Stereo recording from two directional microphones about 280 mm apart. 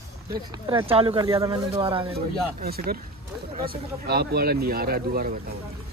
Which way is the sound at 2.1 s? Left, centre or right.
Right.